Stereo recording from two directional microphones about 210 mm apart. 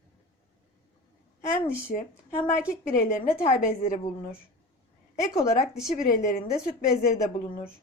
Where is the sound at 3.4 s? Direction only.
40° left (ahead or behind).